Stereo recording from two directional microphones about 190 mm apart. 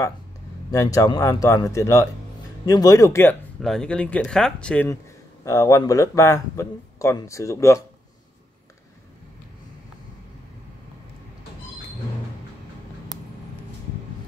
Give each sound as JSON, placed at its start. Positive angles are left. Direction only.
{"t": 0.7, "sound": "speech", "side_deg": 20}
{"t": 5.4, "sound": "speech", "side_deg": 15}